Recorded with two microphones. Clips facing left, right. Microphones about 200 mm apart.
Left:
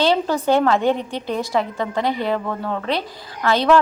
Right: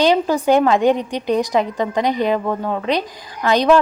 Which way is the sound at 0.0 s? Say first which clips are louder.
Right 3 dB; 15° right (ahead or behind).